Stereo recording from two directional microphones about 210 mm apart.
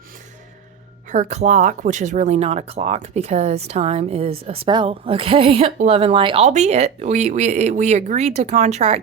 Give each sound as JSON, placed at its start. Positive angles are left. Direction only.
{"t": 1.1, "sound": "speech", "side_deg": -35}